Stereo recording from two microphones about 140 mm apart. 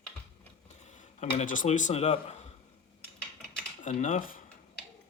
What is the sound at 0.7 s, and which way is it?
Speech, 55° left (ahead or behind).